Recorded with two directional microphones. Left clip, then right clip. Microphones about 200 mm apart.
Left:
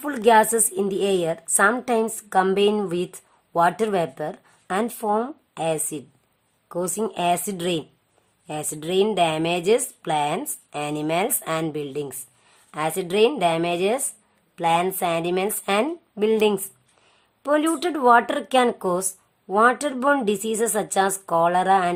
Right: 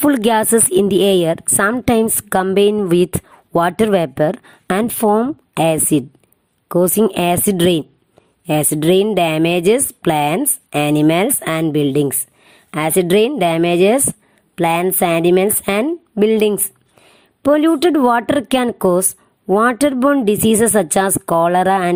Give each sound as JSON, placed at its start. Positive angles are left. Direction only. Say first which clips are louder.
{"t": 0.0, "sound": "a woman's voice", "louder": "right 3 dB", "side_deg": -45}